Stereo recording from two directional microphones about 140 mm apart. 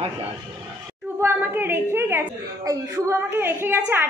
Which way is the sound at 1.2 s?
15° right (ahead or behind).